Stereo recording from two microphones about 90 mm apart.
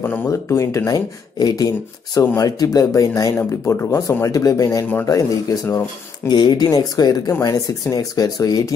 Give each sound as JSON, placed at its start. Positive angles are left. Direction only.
{"t": 0.3, "sound": "speech", "side_deg": 35}
{"t": 3.3, "sound": "speech", "side_deg": 25}
{"t": 6.2, "sound": "speech", "side_deg": 50}